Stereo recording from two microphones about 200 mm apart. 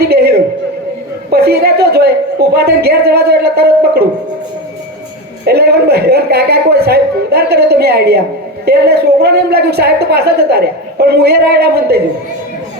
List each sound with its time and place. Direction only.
0.0 s a sound: 50° right (ahead or behind)
1.3 s a woman's voice: 55° right (ahead or behind)
5.5 s a woman's voice: 55° right (ahead or behind)